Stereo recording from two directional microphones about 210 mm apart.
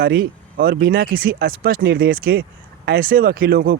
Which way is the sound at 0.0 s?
45° right (ahead or behind).